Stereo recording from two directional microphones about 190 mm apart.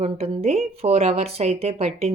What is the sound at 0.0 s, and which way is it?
A woman's voice, 35° right (ahead or behind).